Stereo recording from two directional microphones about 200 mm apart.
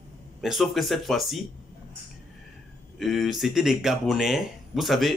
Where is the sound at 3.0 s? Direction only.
Centre (ahead or behind).